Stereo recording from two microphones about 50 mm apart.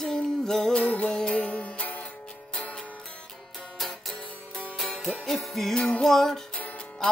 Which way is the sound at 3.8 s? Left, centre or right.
Centre.